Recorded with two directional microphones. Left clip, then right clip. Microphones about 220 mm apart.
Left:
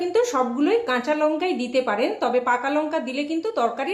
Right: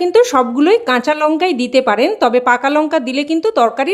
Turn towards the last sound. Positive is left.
turn(degrees=-50)  # may be behind; listen again after turning